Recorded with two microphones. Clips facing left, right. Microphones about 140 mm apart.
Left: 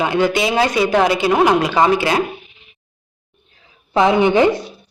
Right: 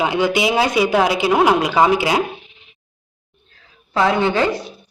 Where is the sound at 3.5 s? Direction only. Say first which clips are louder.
Left 5 dB; 20° left (ahead or behind).